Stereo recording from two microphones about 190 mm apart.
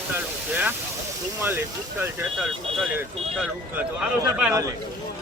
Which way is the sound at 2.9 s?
10° right (ahead or behind).